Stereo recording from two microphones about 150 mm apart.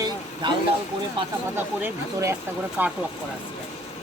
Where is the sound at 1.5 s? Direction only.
15° right (ahead or behind).